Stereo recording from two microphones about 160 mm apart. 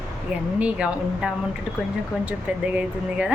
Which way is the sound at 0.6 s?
10° right (ahead or behind).